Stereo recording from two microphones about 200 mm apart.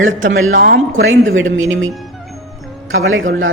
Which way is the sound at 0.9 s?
70° right (ahead or behind).